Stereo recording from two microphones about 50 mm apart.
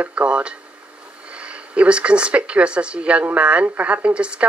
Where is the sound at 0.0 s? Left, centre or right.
Right.